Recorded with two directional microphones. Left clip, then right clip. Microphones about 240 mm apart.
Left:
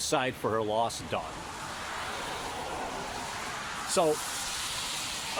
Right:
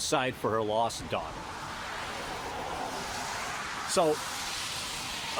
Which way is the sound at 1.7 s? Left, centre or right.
Left.